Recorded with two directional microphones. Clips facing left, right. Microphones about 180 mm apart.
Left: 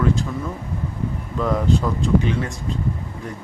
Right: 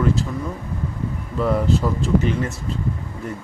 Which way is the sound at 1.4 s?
5° right (ahead or behind).